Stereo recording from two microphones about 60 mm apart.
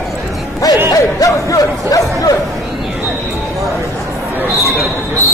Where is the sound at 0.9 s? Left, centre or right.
Left.